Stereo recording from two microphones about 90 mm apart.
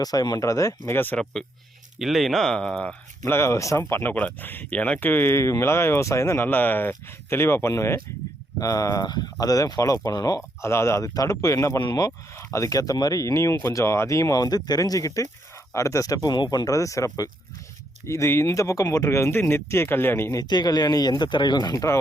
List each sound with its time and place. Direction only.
0.0 s speech: 45° left (ahead or behind)
1.1 s speech: 5° left (ahead or behind)
3.2 s speech: 30° left (ahead or behind)
6.5 s speech: 20° left (ahead or behind)
8.5 s speech: 40° left (ahead or behind)
10.6 s speech: 30° left (ahead or behind)
11.1 s speech: 45° left (ahead or behind)
11.8 s speech: 60° left (ahead or behind)
12.0 s speech: 35° left (ahead or behind)
20.3 s speech: 50° left (ahead or behind)